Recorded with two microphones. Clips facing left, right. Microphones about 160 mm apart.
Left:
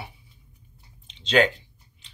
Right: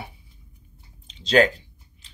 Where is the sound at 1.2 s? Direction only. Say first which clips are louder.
Right 2 dB; 40° right (ahead or behind).